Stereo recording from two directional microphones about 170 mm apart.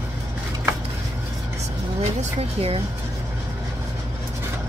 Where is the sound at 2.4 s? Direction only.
35° right (ahead or behind).